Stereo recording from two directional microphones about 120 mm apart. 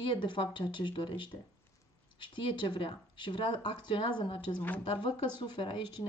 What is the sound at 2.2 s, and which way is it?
Speech, 40° left (ahead or behind).